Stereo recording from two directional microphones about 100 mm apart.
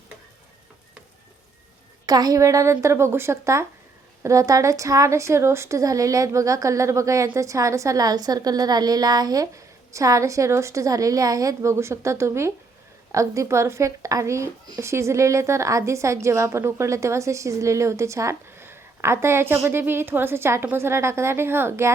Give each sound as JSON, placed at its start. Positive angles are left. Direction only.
{"t": 2.0, "sound": "a woman's voice", "side_deg": -40}